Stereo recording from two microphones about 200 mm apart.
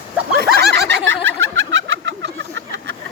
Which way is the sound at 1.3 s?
75° right (ahead or behind).